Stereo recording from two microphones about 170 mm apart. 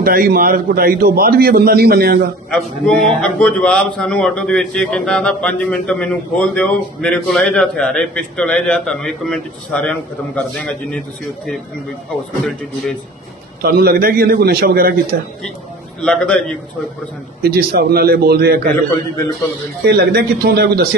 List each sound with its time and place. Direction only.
0.0 s a man's voice: 60° right (ahead or behind)
2.5 s a man's voice: 5° left (ahead or behind)
13.6 s a man's voice: 65° right (ahead or behind)
16.0 s a man's voice: 5° left (ahead or behind)
17.4 s a man's voice: 65° right (ahead or behind)
19.9 s a man's voice: 65° right (ahead or behind)